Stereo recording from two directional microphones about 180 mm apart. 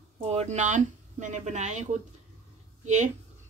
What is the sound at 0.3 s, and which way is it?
Speech, 35° right (ahead or behind).